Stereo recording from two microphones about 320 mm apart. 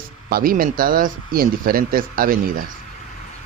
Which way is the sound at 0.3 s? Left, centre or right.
Right.